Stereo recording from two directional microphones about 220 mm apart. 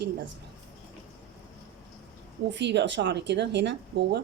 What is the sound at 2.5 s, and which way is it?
Speech, 50° right (ahead or behind).